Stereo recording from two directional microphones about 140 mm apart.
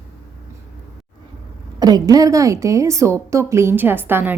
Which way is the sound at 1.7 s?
30° right (ahead or behind).